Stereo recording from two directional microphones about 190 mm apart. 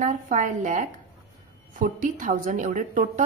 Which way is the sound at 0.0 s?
40° right (ahead or behind).